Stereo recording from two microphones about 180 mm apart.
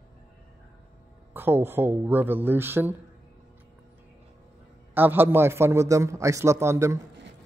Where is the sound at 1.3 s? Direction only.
10° right (ahead or behind).